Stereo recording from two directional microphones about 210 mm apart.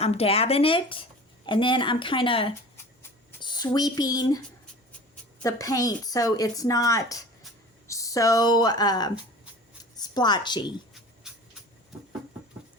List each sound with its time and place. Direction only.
0.0 s speech: 30° left (ahead or behind)
3.4 s a sound: 20° left (ahead or behind)
3.7 s a woman's voice: 20° left (ahead or behind)
5.4 s a woman's voice: 15° left (ahead or behind)